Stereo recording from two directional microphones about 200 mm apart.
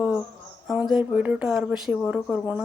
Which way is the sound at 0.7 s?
Centre (ahead or behind).